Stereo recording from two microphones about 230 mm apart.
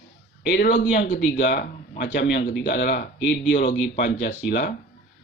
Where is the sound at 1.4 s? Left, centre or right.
Left.